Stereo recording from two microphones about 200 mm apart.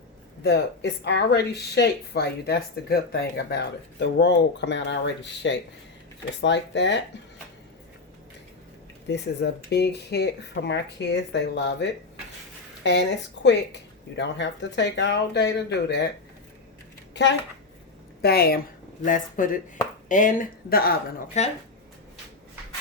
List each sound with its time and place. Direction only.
0.4 s speech: 60° left (ahead or behind)
9.0 s speech: 60° left (ahead or behind)
18.2 s a woman's voice: 50° left (ahead or behind)
21.4 s speech: 35° left (ahead or behind)